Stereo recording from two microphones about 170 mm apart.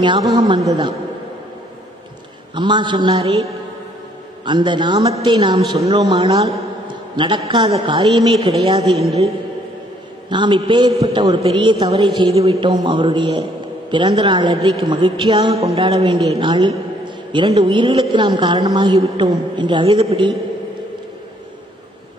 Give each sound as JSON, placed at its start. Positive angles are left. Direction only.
{"t": 0.0, "sound": "a man's voice", "side_deg": -25}
{"t": 2.5, "sound": "a man's voice", "side_deg": -25}
{"t": 4.5, "sound": "a man's voice", "side_deg": -25}
{"t": 10.3, "sound": "a man's voice", "side_deg": -30}
{"t": 15.6, "sound": "a man's voice", "side_deg": -35}